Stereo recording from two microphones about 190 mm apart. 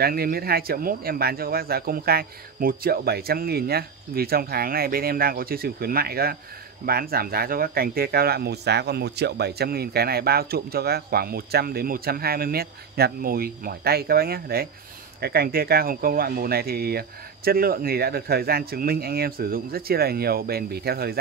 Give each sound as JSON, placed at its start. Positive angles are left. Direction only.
{"t": 0.0, "sound": "speech", "side_deg": -55}